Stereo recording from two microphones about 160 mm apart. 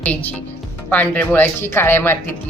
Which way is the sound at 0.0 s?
10° left (ahead or behind).